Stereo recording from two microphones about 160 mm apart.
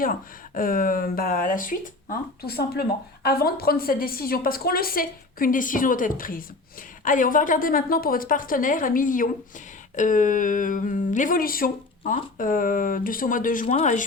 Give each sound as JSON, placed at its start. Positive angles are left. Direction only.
{"t": 0.0, "sound": "speech", "side_deg": 60}